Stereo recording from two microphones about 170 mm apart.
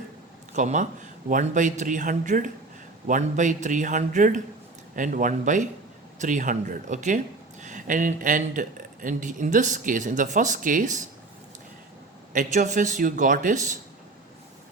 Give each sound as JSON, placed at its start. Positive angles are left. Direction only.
{"t": 0.5, "sound": "speech", "side_deg": -45}
{"t": 12.3, "sound": "speech", "side_deg": -50}